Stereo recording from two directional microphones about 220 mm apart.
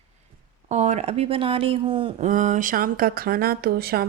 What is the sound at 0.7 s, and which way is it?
Speech, 30° right (ahead or behind).